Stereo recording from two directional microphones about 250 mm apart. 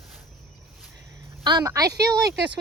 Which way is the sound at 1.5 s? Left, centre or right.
Centre.